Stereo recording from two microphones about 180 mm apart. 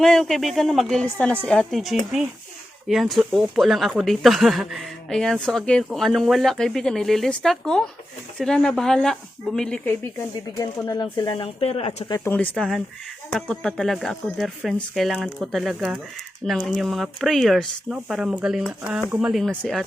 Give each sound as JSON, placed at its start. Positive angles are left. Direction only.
{"t": 0.0, "sound": "speech", "side_deg": 5}
{"t": 12.1, "sound": "speech", "side_deg": 10}